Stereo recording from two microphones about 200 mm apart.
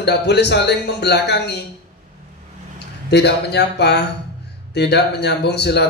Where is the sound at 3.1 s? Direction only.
55° left (ahead or behind).